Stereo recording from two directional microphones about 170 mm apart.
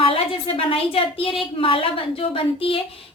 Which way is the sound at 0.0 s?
30° left (ahead or behind).